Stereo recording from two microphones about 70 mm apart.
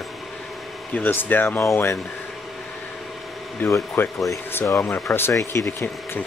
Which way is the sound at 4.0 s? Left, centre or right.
Left.